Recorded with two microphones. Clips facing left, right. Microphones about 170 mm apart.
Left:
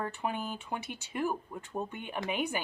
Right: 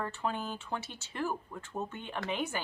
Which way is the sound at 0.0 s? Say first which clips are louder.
Left 1 dB; 15° left (ahead or behind).